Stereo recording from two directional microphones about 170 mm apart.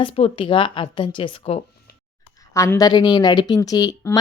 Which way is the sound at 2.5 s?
20° left (ahead or behind).